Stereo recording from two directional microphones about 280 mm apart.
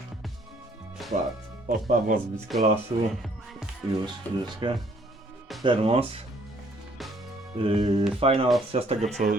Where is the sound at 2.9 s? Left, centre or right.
Right.